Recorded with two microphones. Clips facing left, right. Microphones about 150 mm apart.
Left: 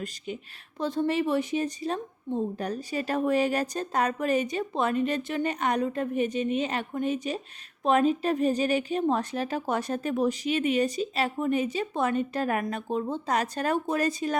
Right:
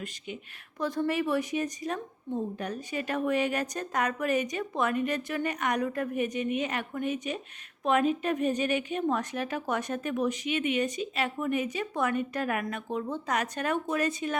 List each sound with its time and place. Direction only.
0.8 s a woman's voice: 25° left (ahead or behind)